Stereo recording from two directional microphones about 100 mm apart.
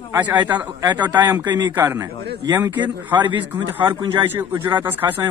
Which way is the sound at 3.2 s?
20° right (ahead or behind).